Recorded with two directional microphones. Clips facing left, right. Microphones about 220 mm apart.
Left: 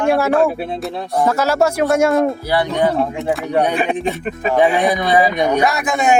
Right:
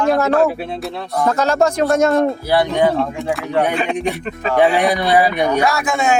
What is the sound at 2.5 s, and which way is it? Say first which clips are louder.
Speech: right 2 dB; 15° right (ahead or behind).